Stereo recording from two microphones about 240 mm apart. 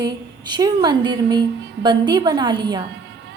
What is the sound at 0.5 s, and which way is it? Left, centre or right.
A woman's voice, centre.